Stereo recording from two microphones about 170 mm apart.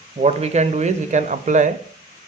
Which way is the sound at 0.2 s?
40° right (ahead or behind).